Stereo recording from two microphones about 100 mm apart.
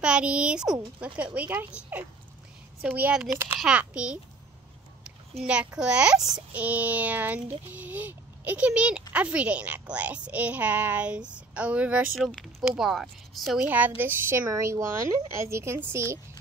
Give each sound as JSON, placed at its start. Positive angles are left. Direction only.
{"t": 0.0, "sound": "a woman's voice", "side_deg": -10}
{"t": 2.8, "sound": "a woman's voice", "side_deg": -10}
{"t": 3.3, "sound": "speech", "side_deg": -25}
{"t": 3.5, "sound": "a woman's voice", "side_deg": -10}
{"t": 5.4, "sound": "a woman's voice", "side_deg": -10}
{"t": 13.7, "sound": "speech", "side_deg": -20}